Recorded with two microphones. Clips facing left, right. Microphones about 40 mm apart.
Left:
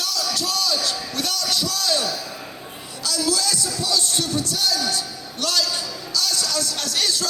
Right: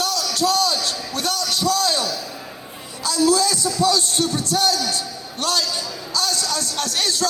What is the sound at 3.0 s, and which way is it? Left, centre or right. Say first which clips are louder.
Music: right 6 dB; right.